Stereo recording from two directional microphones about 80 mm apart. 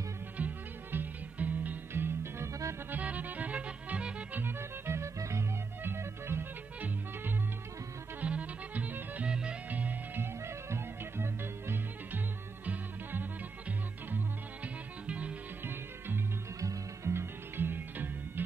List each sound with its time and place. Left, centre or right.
0.4 s music: centre
2.9 s music: centre
8.2 s music: centre
10.4 s music: right; by 15.3 s centre
16.5 s music: right